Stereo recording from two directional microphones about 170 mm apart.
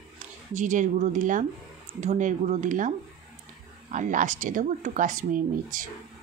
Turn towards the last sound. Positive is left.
turn(degrees=-50)  # may be behind; listen again after turning